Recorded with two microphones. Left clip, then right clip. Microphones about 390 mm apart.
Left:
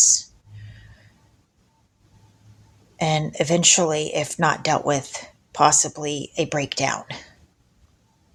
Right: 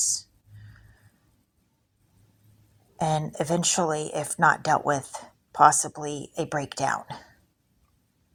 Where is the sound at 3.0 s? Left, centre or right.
Right.